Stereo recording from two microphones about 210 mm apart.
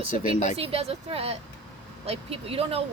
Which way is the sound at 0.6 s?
30° right (ahead or behind).